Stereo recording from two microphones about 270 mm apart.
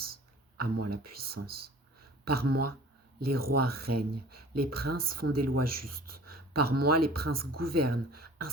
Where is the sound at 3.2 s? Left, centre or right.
Right.